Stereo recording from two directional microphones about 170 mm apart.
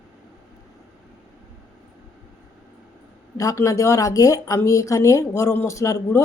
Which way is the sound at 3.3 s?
20° left (ahead or behind).